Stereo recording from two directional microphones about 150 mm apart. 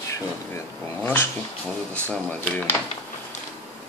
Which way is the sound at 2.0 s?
10° left (ahead or behind).